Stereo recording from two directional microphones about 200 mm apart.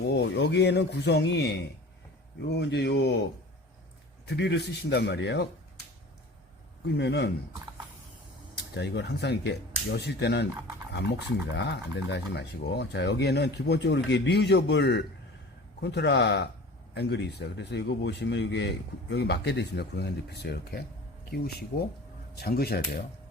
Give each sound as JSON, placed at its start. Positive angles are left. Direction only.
{"t": 0.1, "sound": "speech", "side_deg": 60}
{"t": 4.3, "sound": "speech", "side_deg": 60}
{"t": 6.8, "sound": "speech", "side_deg": 55}
{"t": 8.7, "sound": "speech", "side_deg": 60}
{"t": 11.5, "sound": "speech", "side_deg": 60}
{"t": 21.7, "sound": "speech", "side_deg": 45}